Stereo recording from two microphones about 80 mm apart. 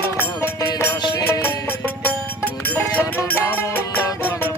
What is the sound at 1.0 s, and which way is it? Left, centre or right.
Music, left.